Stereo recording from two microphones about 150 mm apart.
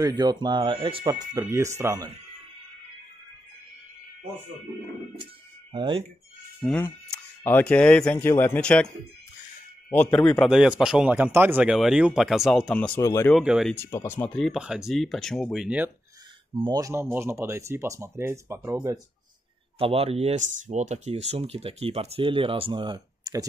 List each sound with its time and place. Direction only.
0.0 s speech: 30° right (ahead or behind)
5.2 s a sound: 30° right (ahead or behind)
6.6 s a man's voice: 5° left (ahead or behind)
10.5 s speech: 5° right (ahead or behind)
13.0 s speech: 20° left (ahead or behind)
13.3 s speech: 5° right (ahead or behind)
13.7 s speech: 15° left (ahead or behind); by 15.9 s 5° right (ahead or behind)
16.5 s speech: 35° right (ahead or behind)
16.8 s speech: 15° right (ahead or behind)
19.8 s speech: 40° right (ahead or behind)